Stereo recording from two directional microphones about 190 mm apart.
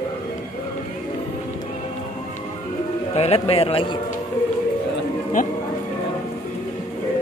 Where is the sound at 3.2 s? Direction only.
30° left (ahead or behind).